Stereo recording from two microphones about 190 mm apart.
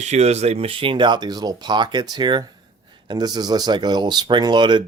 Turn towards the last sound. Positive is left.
turn(degrees=-25)  # may be behind; listen again after turning